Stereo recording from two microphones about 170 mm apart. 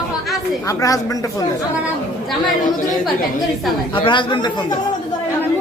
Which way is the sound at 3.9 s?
30° left (ahead or behind).